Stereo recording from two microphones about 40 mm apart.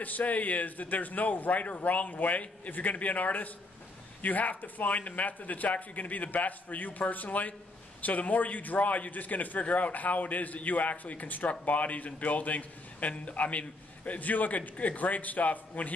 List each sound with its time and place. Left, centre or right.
0.0 s a man's voice: left